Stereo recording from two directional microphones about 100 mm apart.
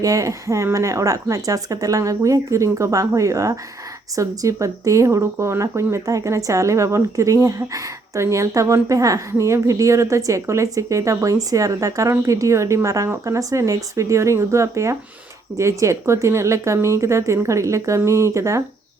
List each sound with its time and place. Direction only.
0.0 s speech: 35° right (ahead or behind)